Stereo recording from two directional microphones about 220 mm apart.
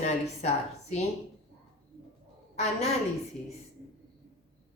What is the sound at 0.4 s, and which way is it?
Speech, 30° left (ahead or behind).